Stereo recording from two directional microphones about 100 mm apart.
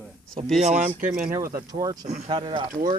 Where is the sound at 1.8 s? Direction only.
40° right (ahead or behind).